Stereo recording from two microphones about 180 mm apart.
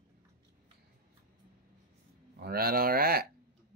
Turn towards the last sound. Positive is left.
turn(degrees=-55)  # may be behind; listen again after turning